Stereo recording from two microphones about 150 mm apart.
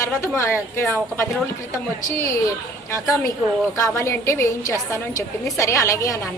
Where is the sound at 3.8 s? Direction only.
20° left (ahead or behind).